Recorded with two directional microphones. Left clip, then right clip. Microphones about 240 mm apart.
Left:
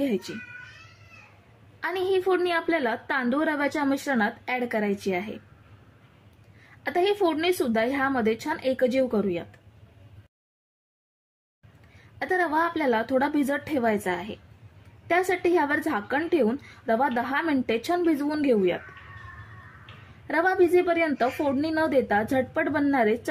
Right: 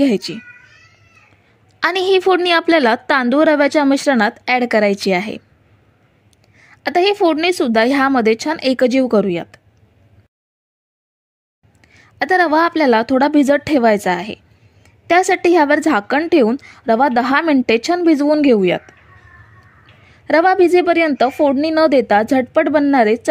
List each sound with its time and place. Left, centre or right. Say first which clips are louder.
0.0 s a woman's voice: right 12 dB; right
1.8 s a woman's voice: right 11 dB; right
6.7 s a woman's voice: right 10 dB; right
12.2 s a woman's voice: right 11 dB; right
20.2 s a woman's voice: right 10 dB; right